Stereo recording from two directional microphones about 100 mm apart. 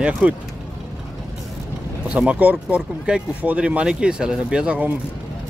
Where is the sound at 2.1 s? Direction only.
10° right (ahead or behind).